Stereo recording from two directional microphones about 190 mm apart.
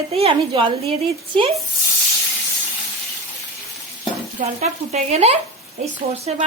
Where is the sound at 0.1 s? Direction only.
30° right (ahead or behind).